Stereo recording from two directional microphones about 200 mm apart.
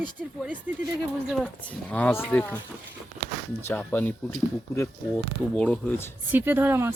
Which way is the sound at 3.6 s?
10° left (ahead or behind).